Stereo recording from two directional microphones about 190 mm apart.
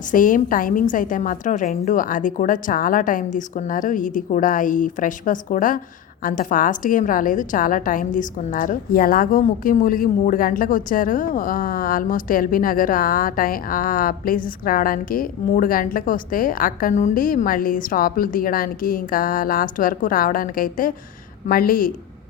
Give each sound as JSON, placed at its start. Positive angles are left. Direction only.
{"t": 0.1, "sound": "a woman's voice", "side_deg": 45}